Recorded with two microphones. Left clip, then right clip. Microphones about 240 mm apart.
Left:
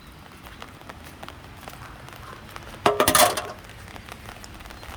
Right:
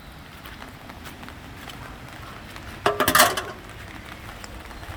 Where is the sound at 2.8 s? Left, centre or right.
Left.